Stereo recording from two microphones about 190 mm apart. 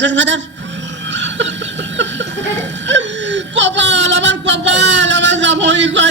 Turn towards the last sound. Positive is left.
turn(degrees=-70)  # may be behind; listen again after turning